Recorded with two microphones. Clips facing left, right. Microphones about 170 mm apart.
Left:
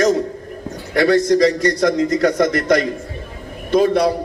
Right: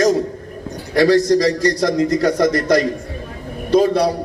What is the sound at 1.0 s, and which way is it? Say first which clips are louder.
A man's voice: even; 35° right (ahead or behind).